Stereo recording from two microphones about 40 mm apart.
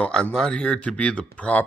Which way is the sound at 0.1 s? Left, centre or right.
Left.